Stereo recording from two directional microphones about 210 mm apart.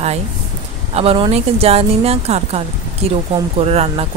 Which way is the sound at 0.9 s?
30° right (ahead or behind).